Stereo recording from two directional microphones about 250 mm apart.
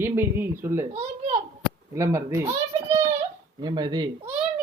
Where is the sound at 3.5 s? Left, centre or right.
Centre.